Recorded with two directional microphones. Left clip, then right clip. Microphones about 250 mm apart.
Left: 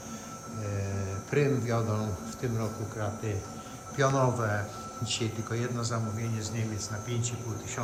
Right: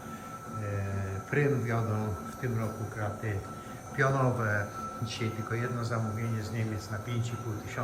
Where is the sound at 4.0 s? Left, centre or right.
Centre.